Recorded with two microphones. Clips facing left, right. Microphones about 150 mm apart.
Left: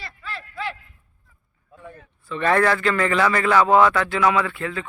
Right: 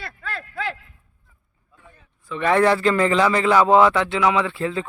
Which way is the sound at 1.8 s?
60° left (ahead or behind).